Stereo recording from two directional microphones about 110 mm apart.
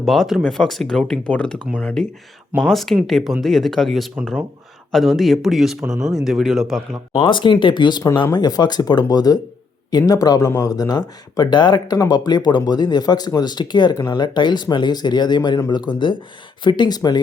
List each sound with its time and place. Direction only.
0.0 s speech: centre (ahead or behind)
7.2 s speech: 45° left (ahead or behind)